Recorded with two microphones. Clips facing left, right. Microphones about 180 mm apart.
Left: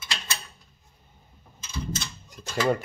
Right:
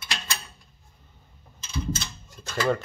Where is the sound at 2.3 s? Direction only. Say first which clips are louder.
Left 1 dB; 15° left (ahead or behind).